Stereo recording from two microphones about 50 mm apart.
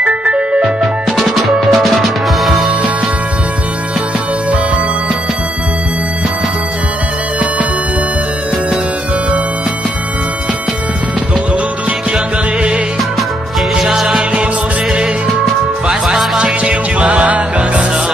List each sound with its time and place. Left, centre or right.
0.0 s music: right
1.2 s music: centre
13.7 s music: centre
16.4 s music: centre